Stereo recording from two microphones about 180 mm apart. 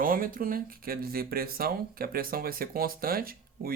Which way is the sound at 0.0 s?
50° right (ahead or behind).